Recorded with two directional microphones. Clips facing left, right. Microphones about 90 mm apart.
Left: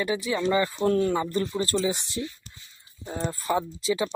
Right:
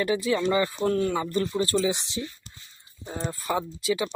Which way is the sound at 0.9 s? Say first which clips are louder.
Left 2 dB; 35° left (ahead or behind).